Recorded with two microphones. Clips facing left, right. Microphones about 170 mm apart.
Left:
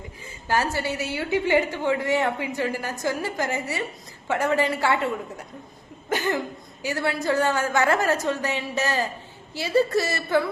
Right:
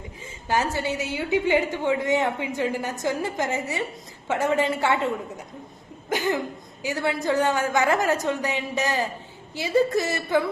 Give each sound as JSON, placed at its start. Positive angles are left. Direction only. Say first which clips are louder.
{"t": 0.4, "sound": "a woman's voice", "louder": "even", "side_deg": -20}
{"t": 6.1, "sound": "a woman's voice", "louder": "even", "side_deg": -15}